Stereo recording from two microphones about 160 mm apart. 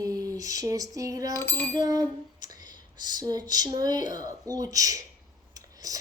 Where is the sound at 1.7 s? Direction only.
25° right (ahead or behind).